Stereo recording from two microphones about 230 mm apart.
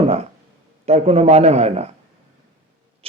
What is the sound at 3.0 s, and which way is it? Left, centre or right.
Rodents, right.